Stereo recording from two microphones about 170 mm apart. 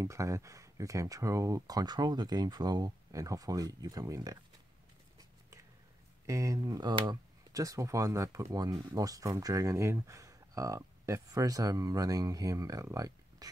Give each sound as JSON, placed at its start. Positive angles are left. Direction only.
{"t": 0.0, "sound": "speech", "side_deg": -20}
{"t": 6.2, "sound": "speech", "side_deg": -20}